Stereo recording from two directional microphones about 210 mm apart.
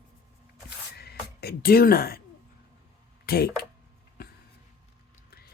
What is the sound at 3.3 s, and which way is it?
Speech, 45° left (ahead or behind).